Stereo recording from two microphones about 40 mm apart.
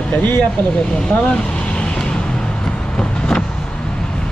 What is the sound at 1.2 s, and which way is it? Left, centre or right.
Vehicle, left.